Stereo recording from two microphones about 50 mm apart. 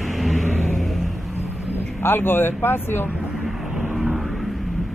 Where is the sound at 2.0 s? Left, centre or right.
Left.